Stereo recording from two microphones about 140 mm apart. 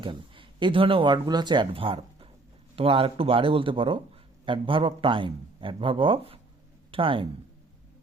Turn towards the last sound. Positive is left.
turn(degrees=-40)  # may be behind; listen again after turning